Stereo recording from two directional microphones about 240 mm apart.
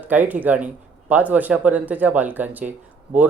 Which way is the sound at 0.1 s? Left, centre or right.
Centre.